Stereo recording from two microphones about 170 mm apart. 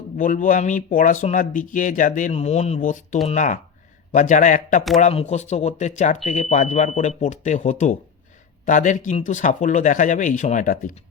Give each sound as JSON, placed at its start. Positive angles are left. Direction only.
{"t": 0.2, "sound": "speech", "side_deg": 50}